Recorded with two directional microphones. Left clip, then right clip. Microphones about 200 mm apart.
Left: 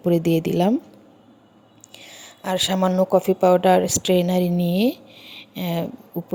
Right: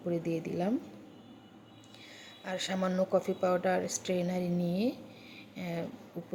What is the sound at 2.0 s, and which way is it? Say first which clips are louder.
Speech: left 12 dB; 40° left (ahead or behind).